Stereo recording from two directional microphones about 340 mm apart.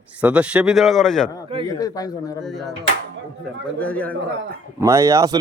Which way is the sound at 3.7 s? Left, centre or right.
Centre.